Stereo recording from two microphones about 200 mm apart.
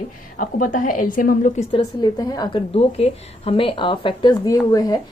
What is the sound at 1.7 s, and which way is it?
A woman's voice, 25° left (ahead or behind).